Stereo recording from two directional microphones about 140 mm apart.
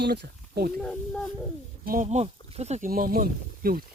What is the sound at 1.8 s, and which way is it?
Speech, 90° right.